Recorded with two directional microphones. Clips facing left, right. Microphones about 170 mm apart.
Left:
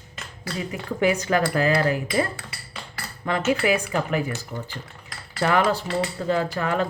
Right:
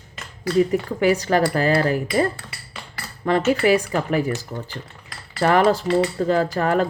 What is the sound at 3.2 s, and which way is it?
Speech, 35° right (ahead or behind).